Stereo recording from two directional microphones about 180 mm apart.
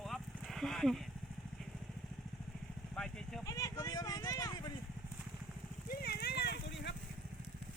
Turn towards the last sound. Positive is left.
turn(degrees=65)  # may be behind; listen again after turning